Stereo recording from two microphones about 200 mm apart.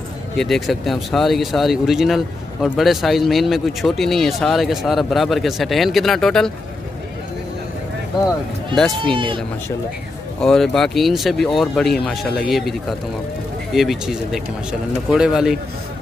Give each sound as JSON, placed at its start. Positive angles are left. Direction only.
{"t": 0.4, "sound": "speech", "side_deg": 0}
{"t": 8.7, "sound": "speech", "side_deg": 0}
{"t": 9.1, "sound": "speech", "side_deg": -25}
{"t": 10.4, "sound": "speech", "side_deg": 0}
{"t": 13.7, "sound": "speech", "side_deg": 0}